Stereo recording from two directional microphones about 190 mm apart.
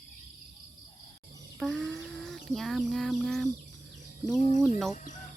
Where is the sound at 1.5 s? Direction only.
Centre (ahead or behind).